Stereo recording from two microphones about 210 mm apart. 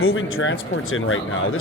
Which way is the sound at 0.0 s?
75° left (ahead or behind).